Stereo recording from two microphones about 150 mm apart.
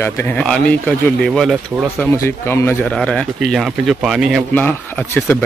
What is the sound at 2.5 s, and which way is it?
Speech, 15° left (ahead or behind).